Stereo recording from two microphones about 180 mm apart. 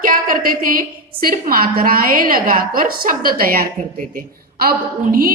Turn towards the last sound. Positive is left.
turn(degrees=-50)  # may be behind; listen again after turning